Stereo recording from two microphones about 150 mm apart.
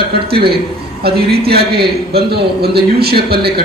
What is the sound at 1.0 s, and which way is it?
A man's voice, 90° right.